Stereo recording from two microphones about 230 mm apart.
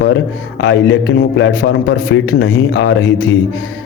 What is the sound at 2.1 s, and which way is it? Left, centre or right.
Speech, left.